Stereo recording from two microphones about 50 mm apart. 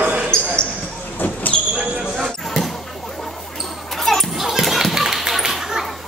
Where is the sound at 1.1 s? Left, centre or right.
Left.